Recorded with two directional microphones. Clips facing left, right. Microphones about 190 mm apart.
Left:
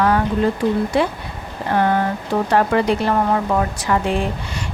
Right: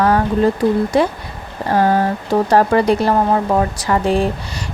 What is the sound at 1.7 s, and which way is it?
Speech, 35° right (ahead or behind).